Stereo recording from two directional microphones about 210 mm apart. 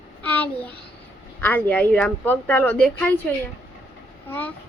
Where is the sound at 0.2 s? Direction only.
5° left (ahead or behind).